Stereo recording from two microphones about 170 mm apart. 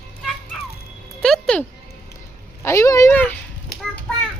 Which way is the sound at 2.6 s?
20° left (ahead or behind).